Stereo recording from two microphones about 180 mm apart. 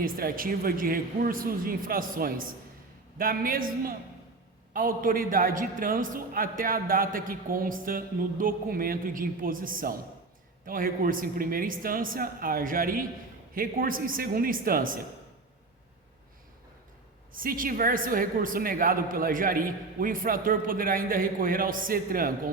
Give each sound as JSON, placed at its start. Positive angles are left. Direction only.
{"t": 0.0, "sound": "a man's voice", "side_deg": -50}
{"t": 17.3, "sound": "a man's voice", "side_deg": -50}